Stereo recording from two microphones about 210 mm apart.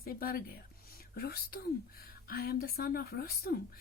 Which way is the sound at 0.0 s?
45° left (ahead or behind).